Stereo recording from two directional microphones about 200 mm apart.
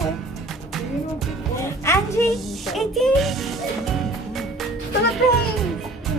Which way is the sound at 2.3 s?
Centre (ahead or behind).